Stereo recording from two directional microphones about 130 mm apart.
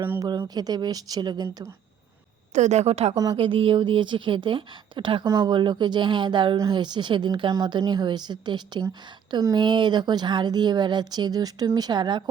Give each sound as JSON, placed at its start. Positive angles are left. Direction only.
{"t": 0.2, "sound": "a woman's voice", "side_deg": -30}
{"t": 2.5, "sound": "a woman's voice", "side_deg": -65}